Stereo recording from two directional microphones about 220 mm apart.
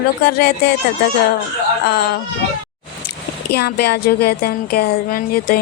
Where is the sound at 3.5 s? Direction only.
50° left (ahead or behind).